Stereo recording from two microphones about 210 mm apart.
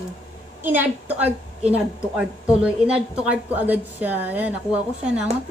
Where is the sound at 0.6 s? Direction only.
10° right (ahead or behind).